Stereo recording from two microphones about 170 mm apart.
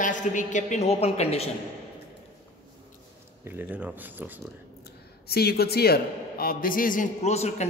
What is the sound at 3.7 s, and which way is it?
Speech, 10° right (ahead or behind).